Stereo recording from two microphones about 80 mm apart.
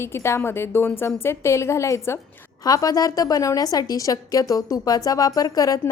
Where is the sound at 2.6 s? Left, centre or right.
Left.